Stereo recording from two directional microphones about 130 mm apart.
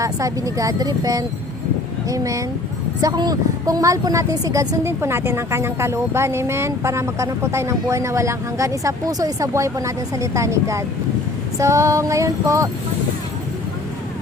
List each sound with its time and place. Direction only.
0.0 s a woman's voice: 25° right (ahead or behind)